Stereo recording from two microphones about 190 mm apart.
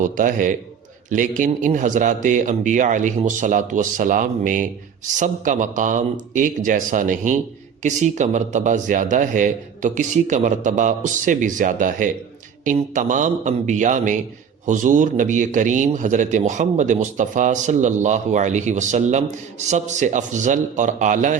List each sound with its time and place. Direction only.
0.0 s speech: 45° right (ahead or behind)